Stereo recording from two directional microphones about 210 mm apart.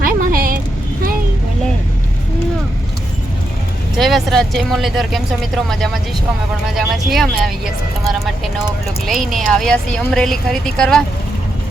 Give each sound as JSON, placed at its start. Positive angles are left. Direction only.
{"t": 0.0, "sound": "vehicle", "side_deg": -45}
{"t": 3.9, "sound": "speech", "side_deg": 0}
{"t": 6.7, "sound": "speech", "side_deg": 0}